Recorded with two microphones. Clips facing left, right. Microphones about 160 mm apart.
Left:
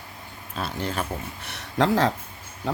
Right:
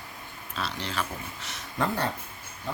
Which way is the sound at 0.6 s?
50° left (ahead or behind).